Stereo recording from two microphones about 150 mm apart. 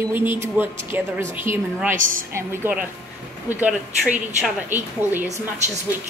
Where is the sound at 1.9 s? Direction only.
60° right (ahead or behind).